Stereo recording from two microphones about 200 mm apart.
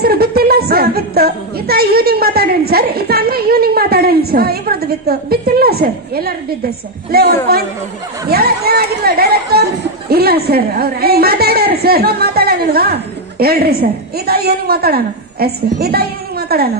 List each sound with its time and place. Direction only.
0.0 s speech: 50° right (ahead or behind)